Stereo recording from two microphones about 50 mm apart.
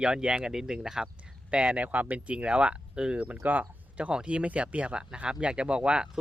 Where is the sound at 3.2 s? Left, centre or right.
Right.